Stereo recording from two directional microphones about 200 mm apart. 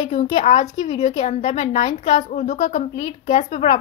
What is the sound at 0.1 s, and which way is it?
A woman's voice, 35° left (ahead or behind).